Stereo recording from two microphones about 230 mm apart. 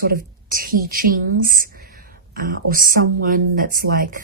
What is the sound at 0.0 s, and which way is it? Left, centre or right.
A woman's voice, right.